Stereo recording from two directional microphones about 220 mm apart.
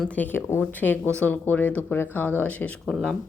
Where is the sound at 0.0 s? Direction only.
5° left (ahead or behind).